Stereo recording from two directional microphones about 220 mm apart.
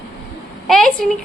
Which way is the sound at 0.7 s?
Centre (ahead or behind).